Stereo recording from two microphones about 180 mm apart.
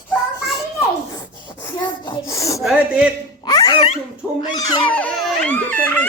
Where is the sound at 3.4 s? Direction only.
20° left (ahead or behind).